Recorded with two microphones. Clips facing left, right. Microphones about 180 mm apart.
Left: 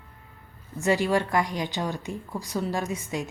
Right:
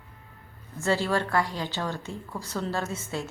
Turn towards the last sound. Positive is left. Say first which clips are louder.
# left 2 dB
turn(degrees=15)  # may be behind; listen again after turning